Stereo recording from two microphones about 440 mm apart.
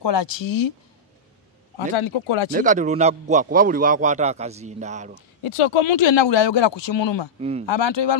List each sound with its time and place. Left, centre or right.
0.0 s speech: left
1.8 s speech: left
2.5 s a man's voice: centre
5.4 s speech: left
7.3 s a man's voice: centre
7.6 s speech: left